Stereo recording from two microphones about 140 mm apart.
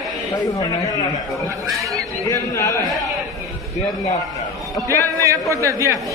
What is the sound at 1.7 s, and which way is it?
Chatter, centre (ahead or behind).